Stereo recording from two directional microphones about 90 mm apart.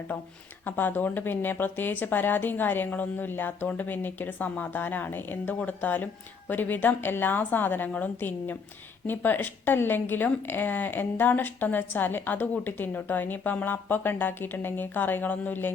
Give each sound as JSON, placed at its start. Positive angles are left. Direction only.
{"t": 0.6, "sound": "a woman's voice", "side_deg": 20}